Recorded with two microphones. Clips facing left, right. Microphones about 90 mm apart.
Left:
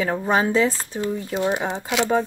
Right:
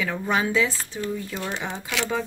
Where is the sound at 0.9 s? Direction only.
30° left (ahead or behind).